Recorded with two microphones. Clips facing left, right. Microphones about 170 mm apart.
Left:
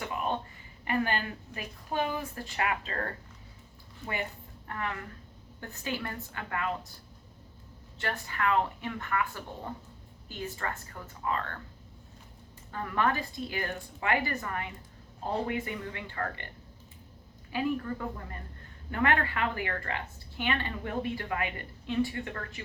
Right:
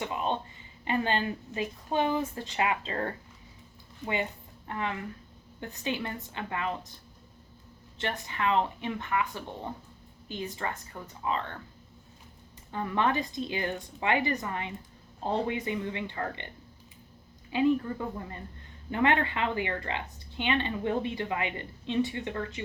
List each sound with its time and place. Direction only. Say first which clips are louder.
0.0 s a sound: right 2 dB; 20° right (ahead or behind)
0.9 s a woman's voice: right 2 dB; 25° right (ahead or behind)
7.9 s a woman's voice: right 1 dB; 20° right (ahead or behind)
12.7 s a woman's voice: right 2 dB; 20° right (ahead or behind)
17.5 s a woman's voice: right 5 dB; 20° right (ahead or behind)
18.9 s a woman's voice: right 2 dB; 20° right (ahead or behind)